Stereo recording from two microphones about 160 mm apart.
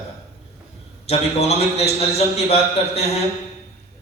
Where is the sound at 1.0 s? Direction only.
40° left (ahead or behind).